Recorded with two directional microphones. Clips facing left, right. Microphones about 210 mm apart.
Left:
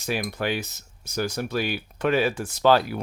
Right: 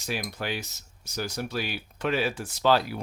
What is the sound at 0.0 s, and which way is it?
Speech, 60° left (ahead or behind).